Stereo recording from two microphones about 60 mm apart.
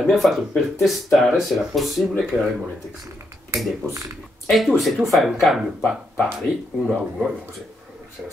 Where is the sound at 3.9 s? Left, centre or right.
Right.